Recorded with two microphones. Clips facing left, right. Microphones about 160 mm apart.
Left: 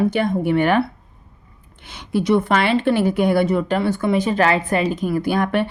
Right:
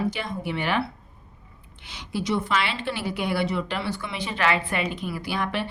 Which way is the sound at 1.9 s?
55° left (ahead or behind).